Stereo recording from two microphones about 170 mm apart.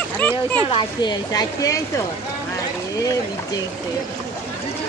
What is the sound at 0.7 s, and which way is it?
Speech, 25° left (ahead or behind).